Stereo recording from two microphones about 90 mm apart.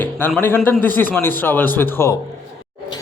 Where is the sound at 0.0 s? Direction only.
25° left (ahead or behind).